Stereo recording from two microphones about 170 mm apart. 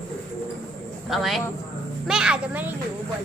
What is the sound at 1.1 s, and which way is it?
A woman's voice, centre (ahead or behind).